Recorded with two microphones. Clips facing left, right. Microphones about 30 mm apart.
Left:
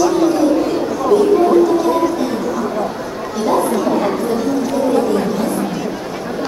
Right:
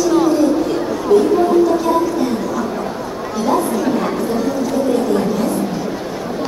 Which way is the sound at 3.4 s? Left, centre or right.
Centre.